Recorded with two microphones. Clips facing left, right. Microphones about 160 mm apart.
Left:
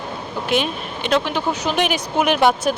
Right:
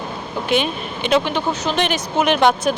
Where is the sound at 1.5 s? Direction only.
10° left (ahead or behind).